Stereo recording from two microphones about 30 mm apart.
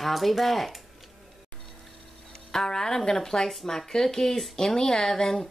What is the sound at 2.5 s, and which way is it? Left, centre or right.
A woman's voice, left.